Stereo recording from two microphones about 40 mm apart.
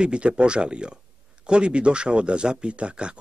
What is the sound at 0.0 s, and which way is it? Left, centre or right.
Speech, right.